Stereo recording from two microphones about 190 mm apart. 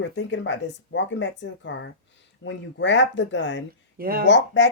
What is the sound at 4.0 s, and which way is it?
Speech, 50° right (ahead or behind).